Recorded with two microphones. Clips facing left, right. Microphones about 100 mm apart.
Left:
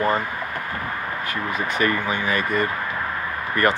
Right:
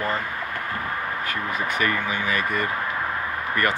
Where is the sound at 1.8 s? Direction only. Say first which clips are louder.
Left 4 dB; 35° left (ahead or behind).